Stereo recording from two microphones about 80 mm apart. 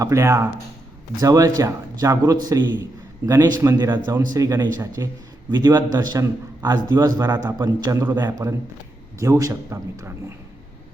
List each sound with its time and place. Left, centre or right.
0.0 s a man's voice: right
4.4 s a man's voice: right
8.2 s a man's voice: right
9.1 s a man's voice: right